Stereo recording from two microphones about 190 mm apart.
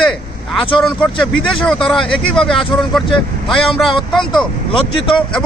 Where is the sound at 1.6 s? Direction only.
Centre (ahead or behind).